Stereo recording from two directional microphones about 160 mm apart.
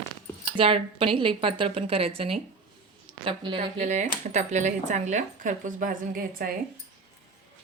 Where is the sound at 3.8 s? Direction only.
45° right (ahead or behind); by 6.4 s 65° right (ahead or behind).